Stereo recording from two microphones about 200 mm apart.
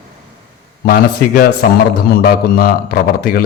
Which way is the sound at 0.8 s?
50° left (ahead or behind).